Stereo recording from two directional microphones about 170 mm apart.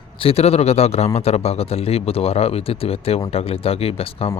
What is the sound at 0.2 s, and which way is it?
A man's voice, 35° left (ahead or behind).